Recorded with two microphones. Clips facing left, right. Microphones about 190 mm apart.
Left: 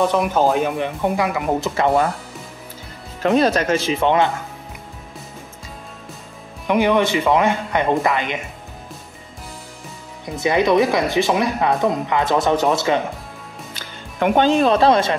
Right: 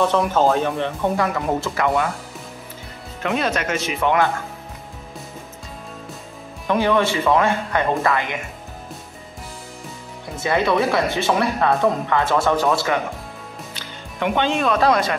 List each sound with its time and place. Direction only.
0.0 s speech: 15° left (ahead or behind)
3.2 s speech: 35° left (ahead or behind)
6.7 s speech: 15° left (ahead or behind)
10.4 s speech: 15° left (ahead or behind)
13.7 s speech: 45° left (ahead or behind); by 15.1 s 25° left (ahead or behind)